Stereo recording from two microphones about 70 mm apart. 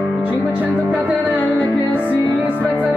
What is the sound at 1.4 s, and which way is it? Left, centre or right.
Music, left.